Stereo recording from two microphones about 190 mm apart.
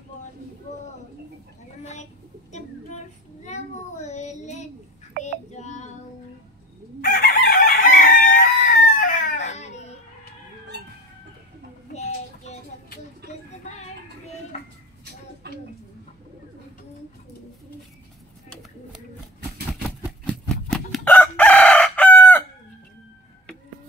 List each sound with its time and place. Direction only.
3.4 s child singing: 35° left (ahead or behind)
7.0 s chicken: 50° left (ahead or behind); by 9.9 s 35° left (ahead or behind)
10.7 s chicken: 60° right (ahead or behind)
11.9 s child singing: 35° left (ahead or behind)
19.7 s a sound: centre (ahead or behind)
20.7 s chicken: 5° left (ahead or behind)